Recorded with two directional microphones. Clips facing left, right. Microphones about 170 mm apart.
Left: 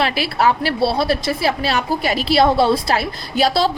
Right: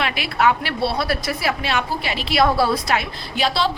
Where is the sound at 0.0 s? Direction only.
35° left (ahead or behind).